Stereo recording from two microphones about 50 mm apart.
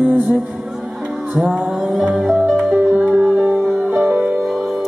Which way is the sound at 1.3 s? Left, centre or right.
Right.